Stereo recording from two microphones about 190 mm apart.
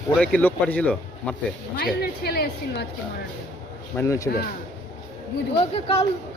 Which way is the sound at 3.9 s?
15° left (ahead or behind).